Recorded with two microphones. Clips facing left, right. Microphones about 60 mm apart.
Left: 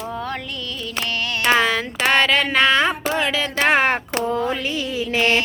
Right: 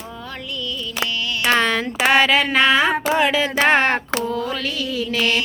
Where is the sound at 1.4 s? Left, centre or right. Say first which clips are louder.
Even; centre.